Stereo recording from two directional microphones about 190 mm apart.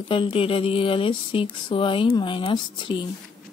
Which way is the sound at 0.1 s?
30° left (ahead or behind).